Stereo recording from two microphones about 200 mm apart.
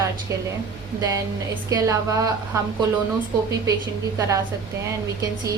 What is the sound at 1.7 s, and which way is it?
Speech, 20° right (ahead or behind).